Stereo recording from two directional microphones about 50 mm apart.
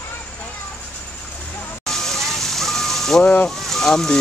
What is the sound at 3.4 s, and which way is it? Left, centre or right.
Speech, centre.